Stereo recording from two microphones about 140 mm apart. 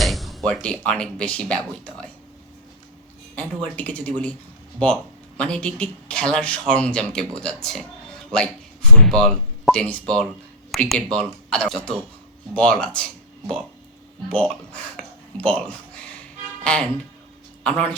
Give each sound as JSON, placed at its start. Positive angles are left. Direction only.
{"t": 0.0, "sound": "speech", "side_deg": 0}
{"t": 3.3, "sound": "speech", "side_deg": 10}
{"t": 5.4, "sound": "speech", "side_deg": 5}
{"t": 14.3, "sound": "speech", "side_deg": 5}